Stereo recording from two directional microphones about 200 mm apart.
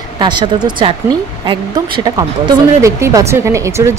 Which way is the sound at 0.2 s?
20° right (ahead or behind).